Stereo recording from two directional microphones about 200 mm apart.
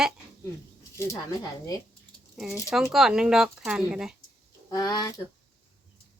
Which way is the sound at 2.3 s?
Centre (ahead or behind).